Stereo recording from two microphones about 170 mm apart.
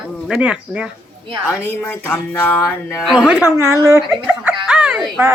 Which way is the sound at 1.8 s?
10° left (ahead or behind).